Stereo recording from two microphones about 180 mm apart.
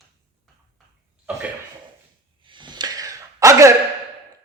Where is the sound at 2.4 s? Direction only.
25° right (ahead or behind).